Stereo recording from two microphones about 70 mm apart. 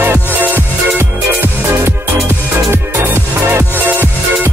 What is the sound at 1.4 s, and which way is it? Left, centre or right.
Music, right.